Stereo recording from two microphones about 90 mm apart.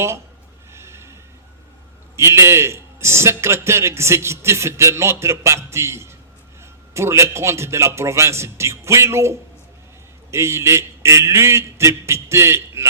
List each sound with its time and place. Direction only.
0.7 s snort: 30° right (ahead or behind)
2.1 s a man's voice: 30° right (ahead or behind)